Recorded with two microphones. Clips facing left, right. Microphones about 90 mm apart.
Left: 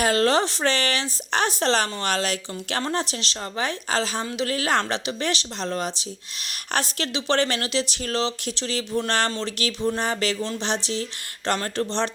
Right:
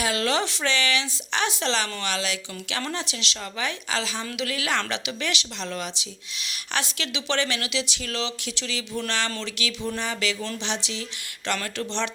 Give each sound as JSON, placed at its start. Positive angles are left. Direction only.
{"t": 0.0, "sound": "a woman's voice", "side_deg": 45}